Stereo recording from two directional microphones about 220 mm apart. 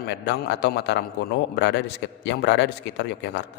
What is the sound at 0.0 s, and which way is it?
A man's voice, 50° left (ahead or behind).